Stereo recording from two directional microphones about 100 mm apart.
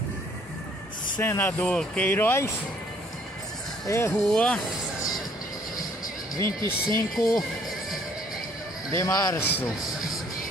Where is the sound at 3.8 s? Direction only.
25° left (ahead or behind).